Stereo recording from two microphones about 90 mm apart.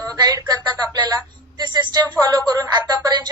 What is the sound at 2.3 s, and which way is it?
Speech, 45° right (ahead or behind).